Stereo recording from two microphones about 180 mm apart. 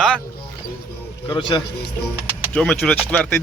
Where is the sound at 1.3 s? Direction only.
25° left (ahead or behind).